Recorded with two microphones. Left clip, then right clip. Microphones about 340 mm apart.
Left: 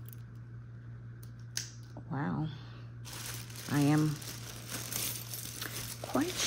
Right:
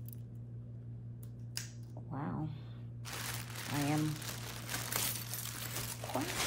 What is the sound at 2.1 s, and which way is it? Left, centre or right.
Speech, left.